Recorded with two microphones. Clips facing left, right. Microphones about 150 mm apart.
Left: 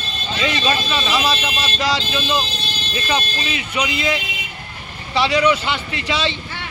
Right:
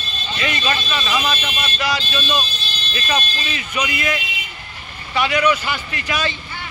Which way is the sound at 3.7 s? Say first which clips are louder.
Left 1 dB; 25° left (ahead or behind).